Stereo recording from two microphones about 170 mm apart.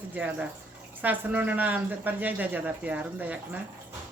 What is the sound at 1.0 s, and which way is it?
Speech, 10° right (ahead or behind).